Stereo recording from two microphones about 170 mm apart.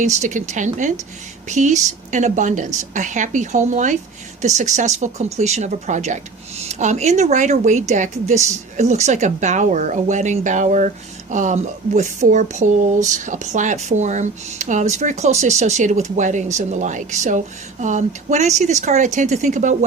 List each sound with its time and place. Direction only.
0.0 s speech: 45° right (ahead or behind)